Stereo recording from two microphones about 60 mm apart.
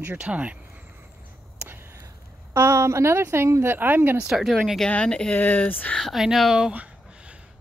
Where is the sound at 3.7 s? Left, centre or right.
Right.